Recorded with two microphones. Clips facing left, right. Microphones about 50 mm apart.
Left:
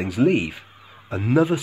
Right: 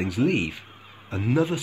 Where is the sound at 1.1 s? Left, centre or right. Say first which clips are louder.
Left 4 dB; left.